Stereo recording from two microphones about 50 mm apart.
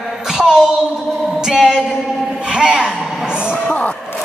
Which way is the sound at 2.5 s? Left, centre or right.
Centre.